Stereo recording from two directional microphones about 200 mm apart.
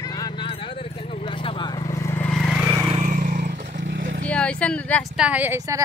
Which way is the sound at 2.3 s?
Centre (ahead or behind).